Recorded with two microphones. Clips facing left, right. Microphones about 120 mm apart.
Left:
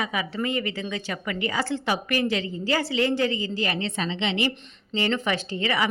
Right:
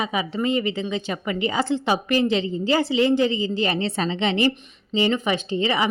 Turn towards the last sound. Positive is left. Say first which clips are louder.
# right 3 dB
turn(degrees=-20)  # may be behind; listen again after turning